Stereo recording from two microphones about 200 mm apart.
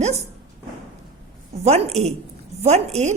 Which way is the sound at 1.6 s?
35° right (ahead or behind).